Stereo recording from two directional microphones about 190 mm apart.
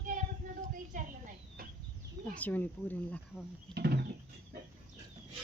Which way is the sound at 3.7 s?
60° right (ahead or behind).